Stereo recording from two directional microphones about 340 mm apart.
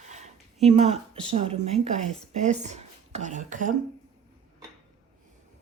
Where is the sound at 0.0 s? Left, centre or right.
Right.